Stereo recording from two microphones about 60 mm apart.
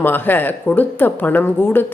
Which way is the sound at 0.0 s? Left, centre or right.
Left.